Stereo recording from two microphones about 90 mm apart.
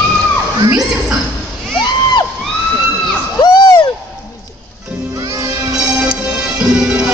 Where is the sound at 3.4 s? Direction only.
50° left (ahead or behind).